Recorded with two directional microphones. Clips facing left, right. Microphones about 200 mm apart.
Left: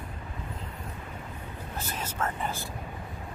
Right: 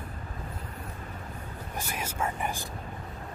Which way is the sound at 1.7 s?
10° right (ahead or behind).